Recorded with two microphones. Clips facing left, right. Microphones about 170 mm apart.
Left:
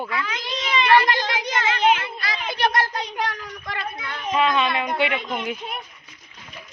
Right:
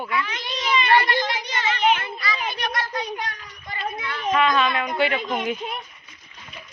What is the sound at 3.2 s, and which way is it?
Speech, 90° left.